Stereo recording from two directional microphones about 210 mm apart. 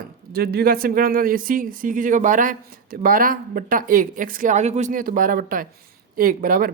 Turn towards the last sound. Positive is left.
turn(degrees=-40)  # may be behind; listen again after turning